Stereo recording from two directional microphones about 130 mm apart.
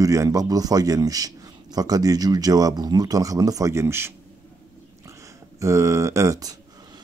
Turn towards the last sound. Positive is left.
turn(degrees=-25)  # may be behind; listen again after turning